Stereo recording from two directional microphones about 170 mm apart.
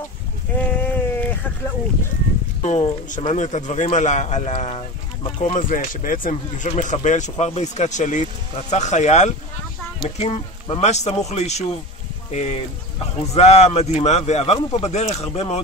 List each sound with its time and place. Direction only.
0.6 s sheep: 10° left (ahead or behind)
2.6 s a man's voice: 40° left (ahead or behind)